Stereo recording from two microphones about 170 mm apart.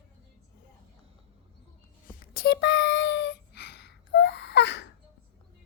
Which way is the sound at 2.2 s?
70° left (ahead or behind).